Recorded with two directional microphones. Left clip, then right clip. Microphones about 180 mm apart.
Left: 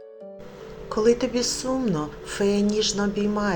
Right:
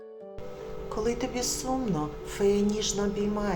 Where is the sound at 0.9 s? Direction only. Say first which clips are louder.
Left 10 dB; 20° left (ahead or behind).